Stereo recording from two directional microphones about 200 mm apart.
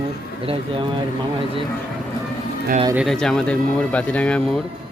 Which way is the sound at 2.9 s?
Centre (ahead or behind).